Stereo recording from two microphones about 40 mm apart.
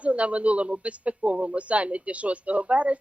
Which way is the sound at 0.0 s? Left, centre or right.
Right.